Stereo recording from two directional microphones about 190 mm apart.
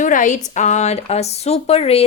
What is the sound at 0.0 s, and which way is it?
A woman's voice, 40° left (ahead or behind).